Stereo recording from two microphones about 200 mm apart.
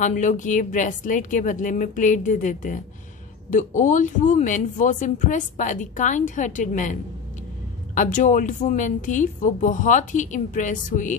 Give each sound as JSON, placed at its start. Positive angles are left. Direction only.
{"t": 0.0, "sound": "speech", "side_deg": 40}